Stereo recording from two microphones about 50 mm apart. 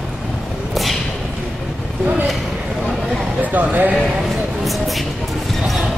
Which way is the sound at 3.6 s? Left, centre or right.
Right.